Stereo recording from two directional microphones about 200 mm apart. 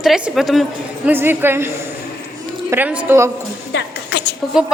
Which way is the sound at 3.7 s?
60° left (ahead or behind).